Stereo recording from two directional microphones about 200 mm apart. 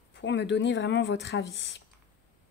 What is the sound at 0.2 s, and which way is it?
A woman's voice, 65° left (ahead or behind).